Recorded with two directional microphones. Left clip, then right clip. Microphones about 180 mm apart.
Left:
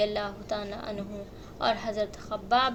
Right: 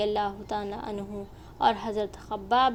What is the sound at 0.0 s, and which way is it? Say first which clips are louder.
A woman's voice: right 1 dB; 30° right (ahead or behind).